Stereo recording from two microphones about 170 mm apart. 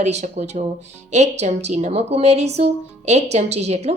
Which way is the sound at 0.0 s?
40° right (ahead or behind).